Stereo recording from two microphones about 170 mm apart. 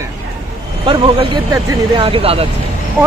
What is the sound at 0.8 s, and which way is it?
Speech, 30° right (ahead or behind).